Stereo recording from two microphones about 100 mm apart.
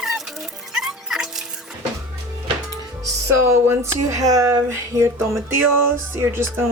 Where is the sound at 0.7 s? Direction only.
5° right (ahead or behind).